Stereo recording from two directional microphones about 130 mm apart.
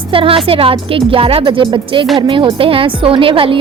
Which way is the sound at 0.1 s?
45° right (ahead or behind).